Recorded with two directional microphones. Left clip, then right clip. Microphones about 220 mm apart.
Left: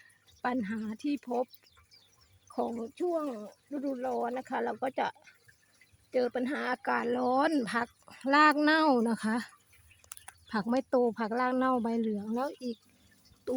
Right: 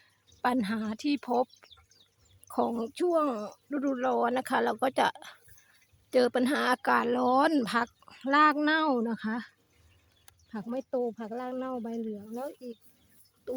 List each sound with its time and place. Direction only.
0.4 s speech: 15° right (ahead or behind); by 9.5 s 5° left (ahead or behind)
10.5 s speech: 15° left (ahead or behind)